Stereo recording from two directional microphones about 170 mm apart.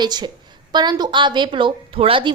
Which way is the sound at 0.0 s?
25° right (ahead or behind).